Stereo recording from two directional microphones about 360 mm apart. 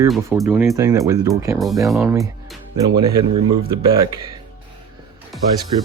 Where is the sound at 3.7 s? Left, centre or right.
Centre.